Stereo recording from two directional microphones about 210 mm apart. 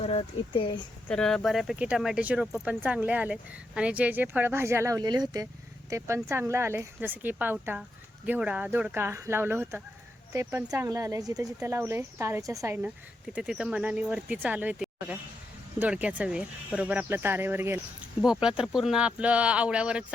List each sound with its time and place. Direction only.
0.0 s speech: 30° left (ahead or behind)
1.0 s speech: 5° left (ahead or behind)